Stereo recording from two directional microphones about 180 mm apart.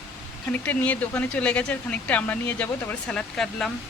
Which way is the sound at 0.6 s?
10° left (ahead or behind).